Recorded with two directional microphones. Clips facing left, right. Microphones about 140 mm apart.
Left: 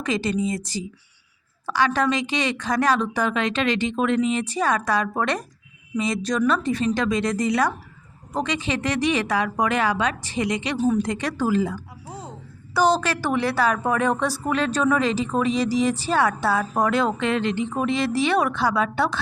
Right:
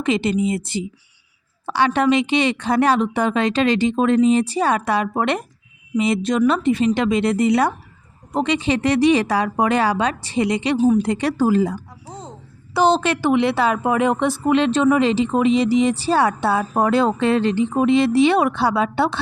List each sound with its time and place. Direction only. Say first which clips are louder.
0.0 s a woman's voice: right 5 dB; 25° right (ahead or behind)
10.8 s speech: right 5 dB; 5° right (ahead or behind)
11.0 s a woman's voice: right 6 dB; 30° right (ahead or behind)
12.0 s a sound: left 1 dB; 10° left (ahead or behind)
12.7 s a woman's voice: right 3 dB; 25° right (ahead or behind)